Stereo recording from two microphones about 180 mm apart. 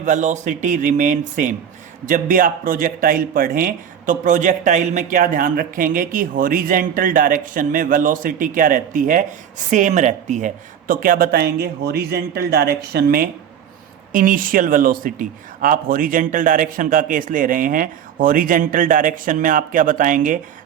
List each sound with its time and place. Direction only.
0.0 s a man's voice: 45° right (ahead or behind)